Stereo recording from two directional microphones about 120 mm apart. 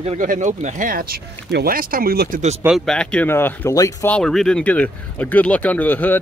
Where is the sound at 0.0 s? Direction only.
90° right.